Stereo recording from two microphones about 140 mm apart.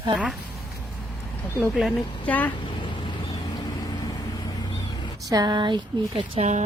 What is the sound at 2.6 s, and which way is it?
Vehicle, 35° left (ahead or behind).